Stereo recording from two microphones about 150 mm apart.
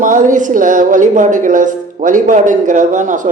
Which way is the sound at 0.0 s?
60° right (ahead or behind).